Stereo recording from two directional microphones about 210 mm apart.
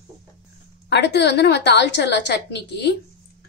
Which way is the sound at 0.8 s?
55° left (ahead or behind).